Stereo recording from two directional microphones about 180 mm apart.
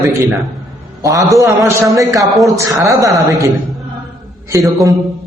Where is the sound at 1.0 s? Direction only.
20° right (ahead or behind).